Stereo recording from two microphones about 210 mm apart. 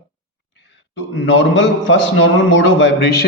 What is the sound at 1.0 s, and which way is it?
A man's voice, 55° left (ahead or behind).